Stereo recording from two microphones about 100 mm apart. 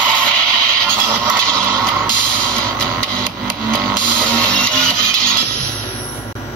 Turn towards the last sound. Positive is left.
turn(degrees=10)  # may be behind; listen again after turning